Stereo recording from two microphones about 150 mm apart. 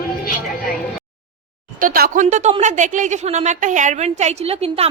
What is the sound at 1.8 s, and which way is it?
Speech, 70° right (ahead or behind).